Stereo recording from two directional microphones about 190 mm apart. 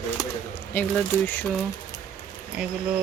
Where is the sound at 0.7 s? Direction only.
10° left (ahead or behind).